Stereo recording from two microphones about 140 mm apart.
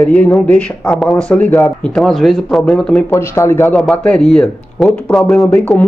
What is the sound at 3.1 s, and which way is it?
Speech, 20° left (ahead or behind).